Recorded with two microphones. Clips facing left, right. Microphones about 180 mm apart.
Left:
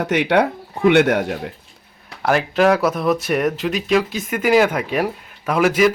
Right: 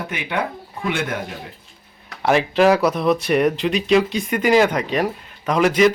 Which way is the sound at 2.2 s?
Centre (ahead or behind).